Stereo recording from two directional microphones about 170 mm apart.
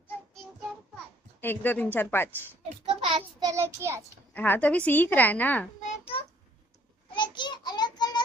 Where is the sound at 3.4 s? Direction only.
20° right (ahead or behind).